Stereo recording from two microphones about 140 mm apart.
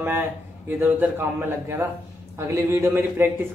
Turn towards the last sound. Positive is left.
turn(degrees=-15)  # may be behind; listen again after turning